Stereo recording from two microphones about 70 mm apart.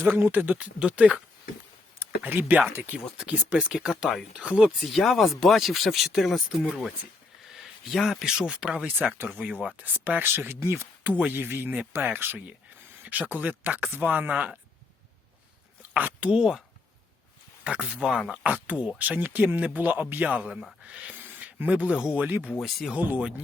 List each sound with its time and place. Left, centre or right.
0.0 s speech: right
2.2 s speech: right
3.2 s speech: centre
7.4 s speech: centre
16.0 s speech: right
16.3 s speech: centre
18.4 s speech: right
20.5 s speech: centre
20.8 s speech: centre
22.2 s speech: right